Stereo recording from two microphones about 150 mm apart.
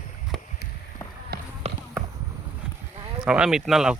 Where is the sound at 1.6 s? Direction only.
45° right (ahead or behind).